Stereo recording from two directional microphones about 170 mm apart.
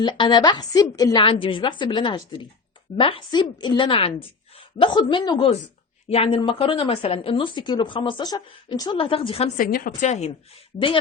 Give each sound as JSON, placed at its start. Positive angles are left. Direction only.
{"t": 0.0, "sound": "a woman's voice", "side_deg": 25}
{"t": 6.1, "sound": "speech", "side_deg": 35}
{"t": 9.6, "sound": "a woman's voice", "side_deg": 60}